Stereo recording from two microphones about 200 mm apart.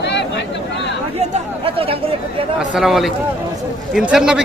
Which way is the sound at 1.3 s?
30° right (ahead or behind).